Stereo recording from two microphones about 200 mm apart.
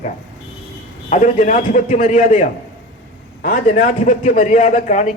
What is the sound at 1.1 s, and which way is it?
A man's voice, 40° left (ahead or behind).